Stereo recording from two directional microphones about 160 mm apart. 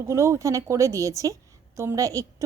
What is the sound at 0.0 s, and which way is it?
A woman's voice, 15° right (ahead or behind).